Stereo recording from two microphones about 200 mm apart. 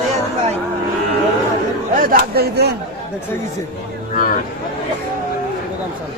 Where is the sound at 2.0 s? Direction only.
50° right (ahead or behind).